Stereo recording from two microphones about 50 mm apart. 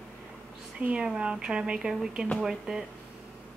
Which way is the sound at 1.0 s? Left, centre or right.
Centre.